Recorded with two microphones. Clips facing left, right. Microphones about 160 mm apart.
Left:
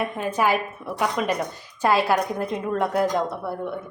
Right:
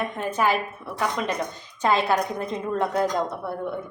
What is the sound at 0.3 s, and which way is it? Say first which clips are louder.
A woman's voice: left 1 dB; 10° left (ahead or behind).